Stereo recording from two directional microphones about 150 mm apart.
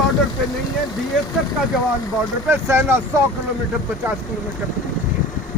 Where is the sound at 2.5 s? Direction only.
15° right (ahead or behind).